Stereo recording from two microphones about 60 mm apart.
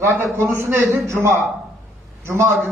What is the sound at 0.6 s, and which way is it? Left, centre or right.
A man's voice, right.